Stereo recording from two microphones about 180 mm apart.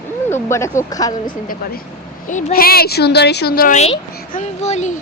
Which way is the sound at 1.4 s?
55° left (ahead or behind).